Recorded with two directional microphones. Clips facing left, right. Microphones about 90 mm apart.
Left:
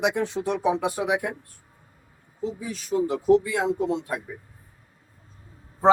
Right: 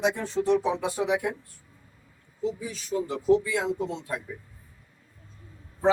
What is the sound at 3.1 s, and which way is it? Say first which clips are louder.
Speech: left 2 dB; 55° left (ahead or behind).